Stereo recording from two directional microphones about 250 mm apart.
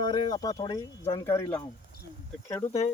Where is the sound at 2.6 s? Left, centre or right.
Left.